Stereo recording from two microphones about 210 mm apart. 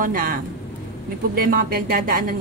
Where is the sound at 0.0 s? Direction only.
40° right (ahead or behind).